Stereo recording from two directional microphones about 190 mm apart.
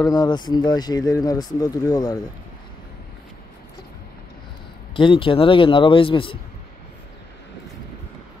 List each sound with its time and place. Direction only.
0.0 s speech: 20° left (ahead or behind)
4.9 s speech: 25° left (ahead or behind)